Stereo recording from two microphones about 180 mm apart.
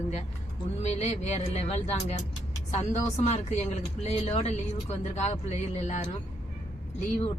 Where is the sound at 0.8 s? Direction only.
40° left (ahead or behind).